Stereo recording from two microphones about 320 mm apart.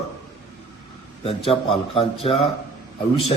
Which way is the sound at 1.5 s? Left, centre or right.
Centre.